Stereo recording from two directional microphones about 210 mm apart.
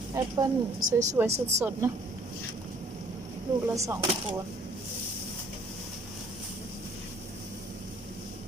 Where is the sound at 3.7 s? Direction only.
15° right (ahead or behind).